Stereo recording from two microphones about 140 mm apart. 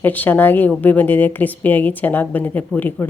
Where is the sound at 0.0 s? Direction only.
15° left (ahead or behind).